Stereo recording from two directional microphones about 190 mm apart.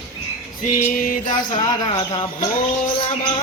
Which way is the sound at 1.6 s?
20° left (ahead or behind).